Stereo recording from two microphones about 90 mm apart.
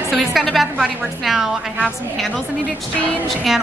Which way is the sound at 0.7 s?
15° right (ahead or behind).